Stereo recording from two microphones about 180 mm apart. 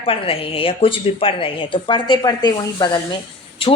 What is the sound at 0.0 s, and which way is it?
A woman's voice, 30° left (ahead or behind).